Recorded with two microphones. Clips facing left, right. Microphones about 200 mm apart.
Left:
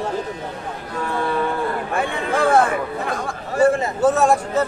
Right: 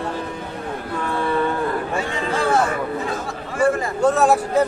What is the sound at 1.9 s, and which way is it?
Chatter, 55° left (ahead or behind).